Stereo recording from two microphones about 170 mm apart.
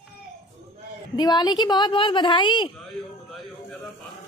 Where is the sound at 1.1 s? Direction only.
25° left (ahead or behind).